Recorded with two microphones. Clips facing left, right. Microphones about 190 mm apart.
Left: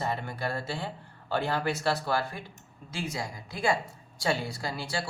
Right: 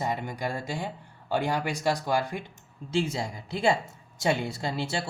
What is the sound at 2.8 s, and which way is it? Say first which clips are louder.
Speech: right 7 dB; 25° right (ahead or behind).